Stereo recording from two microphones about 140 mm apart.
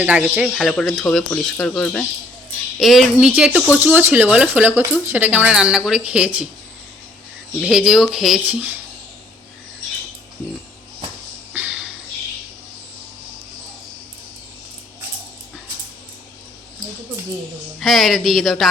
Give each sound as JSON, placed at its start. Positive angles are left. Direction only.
{"t": 0.0, "sound": "speech", "side_deg": -10}
{"t": 0.3, "sound": "speech", "side_deg": 0}
{"t": 7.6, "sound": "speech", "side_deg": -5}
{"t": 11.5, "sound": "a sound", "side_deg": -10}
{"t": 17.7, "sound": "speech", "side_deg": 0}